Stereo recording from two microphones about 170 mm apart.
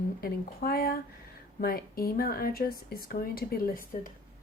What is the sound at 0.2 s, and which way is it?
Speech, 60° left (ahead or behind).